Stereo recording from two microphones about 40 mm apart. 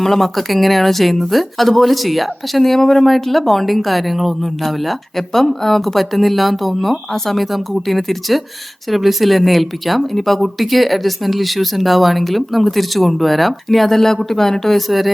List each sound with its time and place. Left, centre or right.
0.0 s speech: centre